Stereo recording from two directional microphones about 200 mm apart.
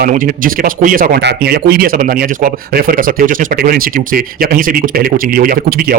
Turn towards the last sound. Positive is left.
turn(degrees=-50)  # may be behind; listen again after turning